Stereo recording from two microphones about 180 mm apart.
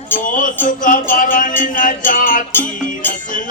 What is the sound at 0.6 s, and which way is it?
Music, 45° left (ahead or behind).